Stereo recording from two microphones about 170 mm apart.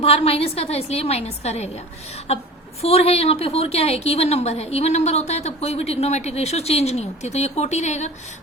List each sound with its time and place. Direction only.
0.0 s a woman's voice: 35° left (ahead or behind)
2.8 s a woman's voice: 35° left (ahead or behind)